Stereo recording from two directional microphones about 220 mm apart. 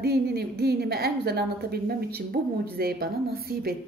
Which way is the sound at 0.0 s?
45° right (ahead or behind).